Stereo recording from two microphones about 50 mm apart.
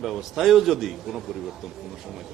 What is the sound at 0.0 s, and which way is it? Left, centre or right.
A man's voice, centre.